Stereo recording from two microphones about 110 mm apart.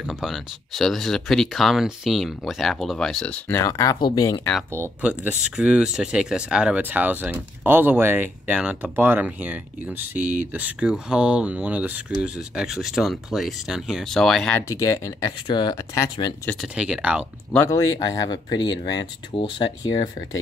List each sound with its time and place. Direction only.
0.0 s speech: centre (ahead or behind)
3.4 s speech: 25° left (ahead or behind)
5.0 s speech: 10° right (ahead or behind)
14.6 s speech: 30° left (ahead or behind)
15.4 s speech: 45° left (ahead or behind)
15.7 s speech: 30° left (ahead or behind)
16.6 s speech: 5° right (ahead or behind)
17.6 s speech: 35° left (ahead or behind)